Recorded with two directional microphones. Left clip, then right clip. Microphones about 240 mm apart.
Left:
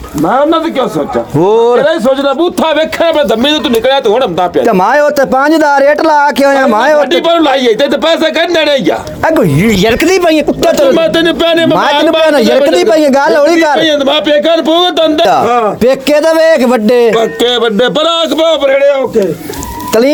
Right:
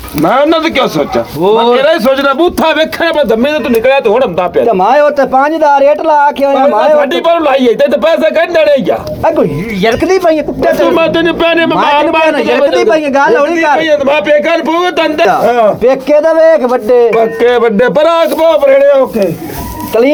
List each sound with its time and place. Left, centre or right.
0.3 s speech: right
1.5 s speech: left
1.9 s a man's voice: centre
2.4 s speech: centre
3.2 s a man's voice: centre
4.7 s speech: left
7.1 s a man's voice: centre
9.2 s speech: left
11.0 s a man's voice: left
12.2 s speech: left
13.8 s a man's voice: left
15.8 s speech: left
17.9 s a man's voice: left
19.9 s speech: left